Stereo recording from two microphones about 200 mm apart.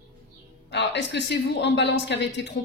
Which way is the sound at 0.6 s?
60° left (ahead or behind).